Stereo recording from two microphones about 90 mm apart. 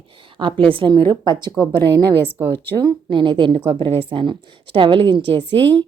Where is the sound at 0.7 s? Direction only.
65° right (ahead or behind); by 2.1 s 50° right (ahead or behind).